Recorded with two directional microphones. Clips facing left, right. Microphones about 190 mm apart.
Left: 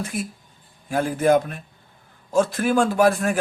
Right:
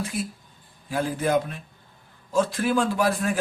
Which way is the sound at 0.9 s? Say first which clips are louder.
Left 6 dB; 50° left (ahead or behind).